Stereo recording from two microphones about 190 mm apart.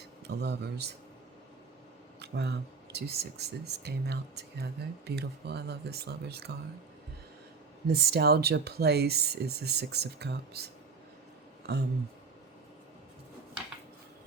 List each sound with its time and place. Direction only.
0.3 s speech: 60° right (ahead or behind)
2.1 s speech: 60° right (ahead or behind)
7.9 s speech: 60° right (ahead or behind)
11.7 s speech: 60° right (ahead or behind)